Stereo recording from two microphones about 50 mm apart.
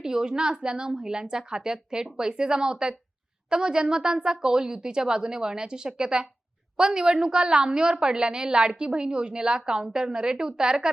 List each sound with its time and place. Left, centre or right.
0.0 s a woman's voice: centre